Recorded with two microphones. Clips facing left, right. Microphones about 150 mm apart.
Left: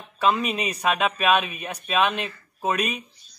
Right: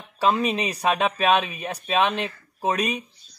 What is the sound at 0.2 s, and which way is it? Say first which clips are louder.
Speech: right 1 dB; 30° right (ahead or behind).